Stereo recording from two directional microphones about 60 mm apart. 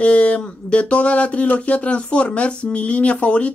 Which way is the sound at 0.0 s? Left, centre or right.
Centre.